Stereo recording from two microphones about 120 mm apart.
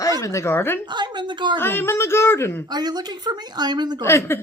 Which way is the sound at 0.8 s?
40° right (ahead or behind).